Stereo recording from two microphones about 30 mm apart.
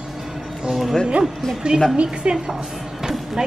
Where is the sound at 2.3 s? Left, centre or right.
Right.